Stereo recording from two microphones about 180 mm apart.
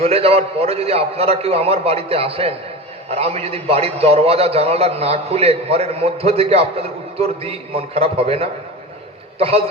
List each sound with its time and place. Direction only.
0.0 s a man's voice: 35° right (ahead or behind)